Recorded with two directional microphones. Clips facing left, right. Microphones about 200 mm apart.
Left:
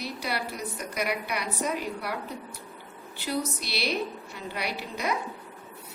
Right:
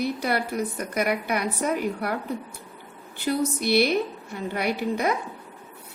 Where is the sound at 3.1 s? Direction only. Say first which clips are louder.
Right 6 dB; 55° right (ahead or behind).